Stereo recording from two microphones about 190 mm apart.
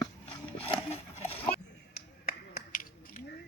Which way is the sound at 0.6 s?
30° left (ahead or behind).